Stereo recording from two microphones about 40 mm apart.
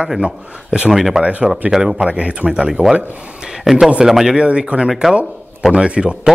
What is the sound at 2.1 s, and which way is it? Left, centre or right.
Speech, right.